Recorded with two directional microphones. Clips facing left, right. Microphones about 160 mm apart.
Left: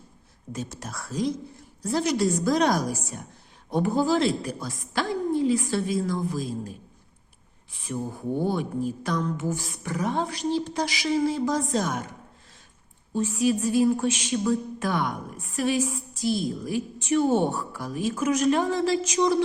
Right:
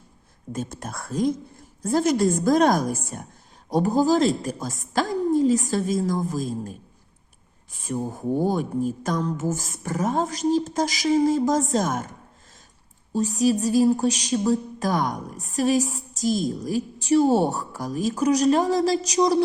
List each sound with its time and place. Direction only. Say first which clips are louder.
0.5 s a woman's voice: right 3 dB; 50° right (ahead or behind)
3.7 s a woman's voice: right 3 dB; 40° right (ahead or behind)
13.1 s speech: right 3 dB; 40° right (ahead or behind)